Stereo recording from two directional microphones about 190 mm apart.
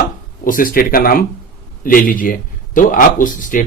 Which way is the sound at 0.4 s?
45° left (ahead or behind).